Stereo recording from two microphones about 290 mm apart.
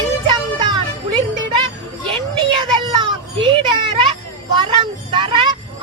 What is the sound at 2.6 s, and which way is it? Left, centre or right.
Children playing, centre.